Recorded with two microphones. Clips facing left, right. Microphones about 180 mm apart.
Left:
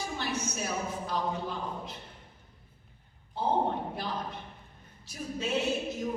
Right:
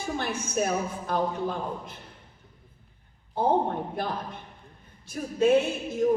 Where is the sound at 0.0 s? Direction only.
55° right (ahead or behind).